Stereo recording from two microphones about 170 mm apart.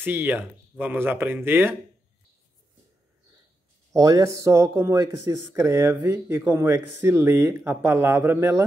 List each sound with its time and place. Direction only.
0.0 s speech: 10° right (ahead or behind)
3.9 s speech: 20° right (ahead or behind)